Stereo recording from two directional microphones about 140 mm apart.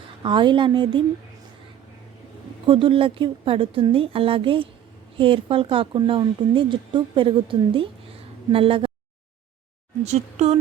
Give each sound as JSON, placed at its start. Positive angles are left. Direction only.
{"t": 0.2, "sound": "speech", "side_deg": -35}
{"t": 2.6, "sound": "speech", "side_deg": -40}
{"t": 10.0, "sound": "speech", "side_deg": -50}